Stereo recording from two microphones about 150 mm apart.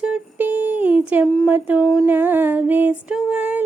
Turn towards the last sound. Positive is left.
turn(degrees=-10)  # may be behind; listen again after turning